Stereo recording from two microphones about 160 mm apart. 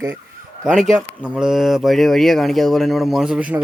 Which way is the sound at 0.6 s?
5° right (ahead or behind).